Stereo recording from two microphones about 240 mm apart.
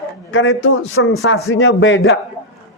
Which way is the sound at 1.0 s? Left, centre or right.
Left.